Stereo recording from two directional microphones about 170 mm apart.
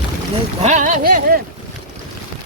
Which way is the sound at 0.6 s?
45° right (ahead or behind).